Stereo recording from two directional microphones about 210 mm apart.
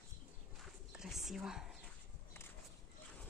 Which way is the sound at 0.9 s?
Centre (ahead or behind).